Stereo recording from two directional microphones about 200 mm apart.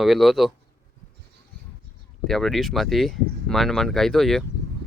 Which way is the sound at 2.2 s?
Centre (ahead or behind).